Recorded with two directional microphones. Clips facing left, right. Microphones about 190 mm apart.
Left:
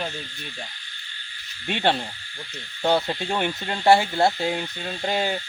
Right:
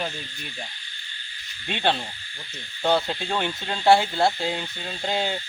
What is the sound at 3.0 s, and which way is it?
Speech, 10° left (ahead or behind).